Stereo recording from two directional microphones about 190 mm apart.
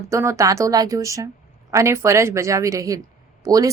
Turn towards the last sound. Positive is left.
turn(degrees=-20)  # may be behind; listen again after turning